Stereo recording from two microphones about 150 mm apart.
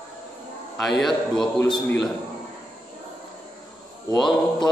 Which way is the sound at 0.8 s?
Centre (ahead or behind).